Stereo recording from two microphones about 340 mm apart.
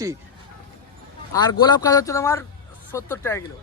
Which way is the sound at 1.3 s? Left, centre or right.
Centre.